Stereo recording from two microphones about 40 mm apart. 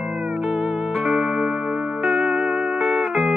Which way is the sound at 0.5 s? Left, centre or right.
Centre.